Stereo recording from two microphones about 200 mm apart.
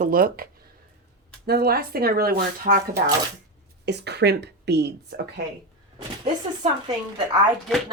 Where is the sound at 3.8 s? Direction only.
55° right (ahead or behind).